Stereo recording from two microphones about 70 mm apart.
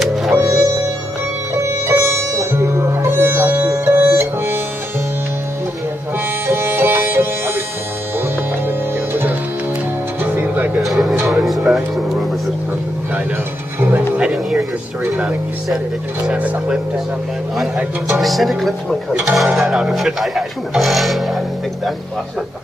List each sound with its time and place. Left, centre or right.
0.0 s music: centre
1.9 s sitar: right
3.8 s music: right
6.4 s music: right
8.6 s music: right
10.8 s music: centre
14.3 s a sound: centre
16.3 s speech: centre
17.6 s speech: centre